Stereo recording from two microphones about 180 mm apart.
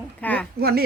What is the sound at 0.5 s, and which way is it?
Speech, 60° right (ahead or behind).